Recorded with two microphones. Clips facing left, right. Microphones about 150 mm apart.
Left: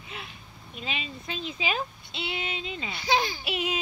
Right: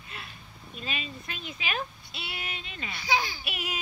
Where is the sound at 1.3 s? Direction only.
25° left (ahead or behind).